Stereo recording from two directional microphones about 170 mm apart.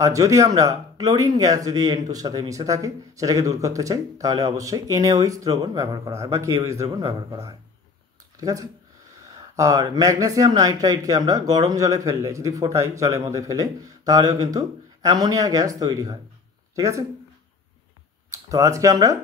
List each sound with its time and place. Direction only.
0.0 s speech: 20° right (ahead or behind)
8.4 s speech: 20° right (ahead or behind)
18.3 s speech: 20° right (ahead or behind)